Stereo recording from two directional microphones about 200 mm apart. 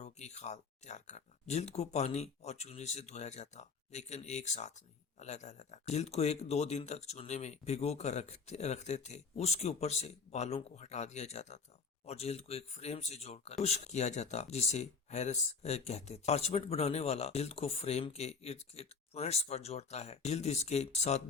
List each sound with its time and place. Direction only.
0.0 s speech: 35° left (ahead or behind)